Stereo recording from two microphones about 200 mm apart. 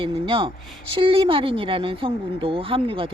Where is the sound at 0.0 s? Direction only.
25° right (ahead or behind).